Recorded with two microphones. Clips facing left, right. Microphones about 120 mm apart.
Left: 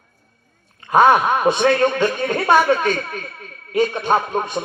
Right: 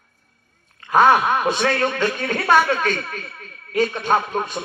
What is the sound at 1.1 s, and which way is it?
A woman's voice, 45° left (ahead or behind).